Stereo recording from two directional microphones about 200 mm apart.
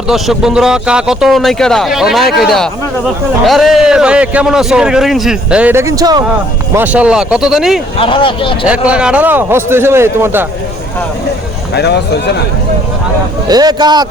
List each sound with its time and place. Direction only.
0.1 s a man's voice: centre (ahead or behind); by 6.2 s 20° right (ahead or behind)
6.7 s a man's voice: 5° right (ahead or behind)
7.9 s speech: 25° left (ahead or behind)
8.6 s a man's voice: 5° right (ahead or behind)
11.7 s speech: 55° left (ahead or behind)
13.5 s speech: 20° right (ahead or behind)